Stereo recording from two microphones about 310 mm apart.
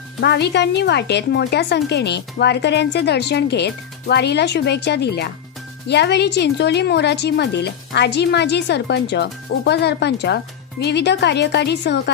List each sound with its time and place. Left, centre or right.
0.2 s a woman's voice: left